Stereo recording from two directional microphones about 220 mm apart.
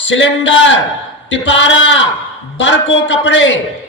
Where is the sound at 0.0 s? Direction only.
55° left (ahead or behind).